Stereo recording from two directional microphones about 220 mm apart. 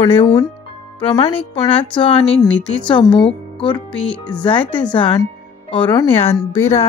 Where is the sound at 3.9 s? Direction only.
5° left (ahead or behind).